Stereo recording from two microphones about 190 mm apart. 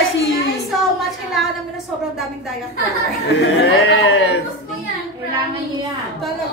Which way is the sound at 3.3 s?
65° left (ahead or behind).